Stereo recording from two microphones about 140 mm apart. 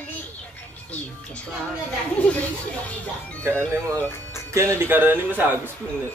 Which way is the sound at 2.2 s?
10° left (ahead or behind).